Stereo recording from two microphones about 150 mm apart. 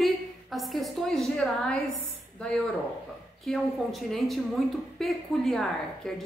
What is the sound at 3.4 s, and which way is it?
A woman's voice, centre (ahead or behind).